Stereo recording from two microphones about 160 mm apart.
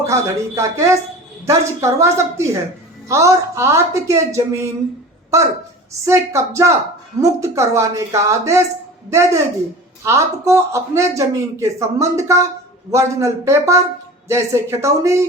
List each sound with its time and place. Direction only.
0.0 s a man's voice: 20° right (ahead or behind)
6.1 s a woman's voice: 15° right (ahead or behind)